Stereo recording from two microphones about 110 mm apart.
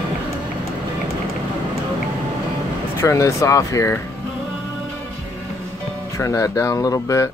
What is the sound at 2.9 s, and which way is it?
Speech, 25° left (ahead or behind).